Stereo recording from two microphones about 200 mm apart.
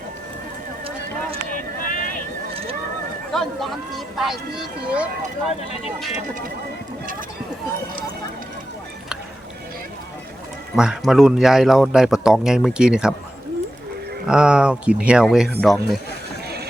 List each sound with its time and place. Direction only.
1.8 s vehicle: 40° left (ahead or behind)
3.3 s speech: centre (ahead or behind)
10.8 s speech: 5° right (ahead or behind)
14.3 s speech: 5° right (ahead or behind)